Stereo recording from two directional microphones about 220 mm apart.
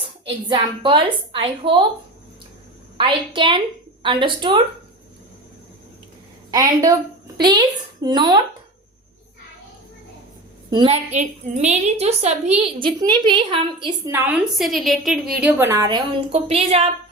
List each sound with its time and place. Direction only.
0.3 s a woman's voice: 25° right (ahead or behind)
3.0 s a woman's voice: 25° right (ahead or behind)
6.5 s a woman's voice: 15° right (ahead or behind)
10.7 s a woman's voice: 25° right (ahead or behind)
14.1 s a woman's voice: 5° right (ahead or behind); by 16.9 s 25° right (ahead or behind)